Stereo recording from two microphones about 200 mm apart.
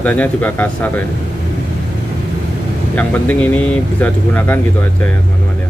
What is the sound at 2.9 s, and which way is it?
Speech, 5° left (ahead or behind).